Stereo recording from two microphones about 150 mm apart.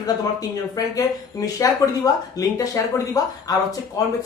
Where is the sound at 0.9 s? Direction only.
25° left (ahead or behind).